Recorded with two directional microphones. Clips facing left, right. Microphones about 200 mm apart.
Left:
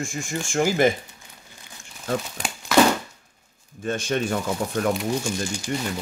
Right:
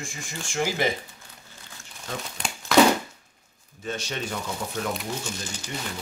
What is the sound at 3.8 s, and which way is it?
Speech, 50° left (ahead or behind).